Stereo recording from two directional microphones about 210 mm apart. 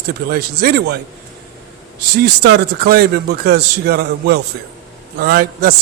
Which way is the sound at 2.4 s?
50° right (ahead or behind).